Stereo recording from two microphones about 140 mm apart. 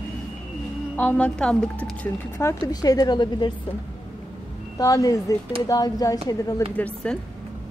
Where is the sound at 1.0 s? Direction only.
10° left (ahead or behind).